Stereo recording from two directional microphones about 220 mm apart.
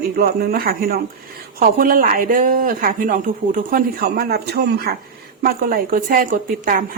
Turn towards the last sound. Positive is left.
turn(degrees=-40)  # may be behind; listen again after turning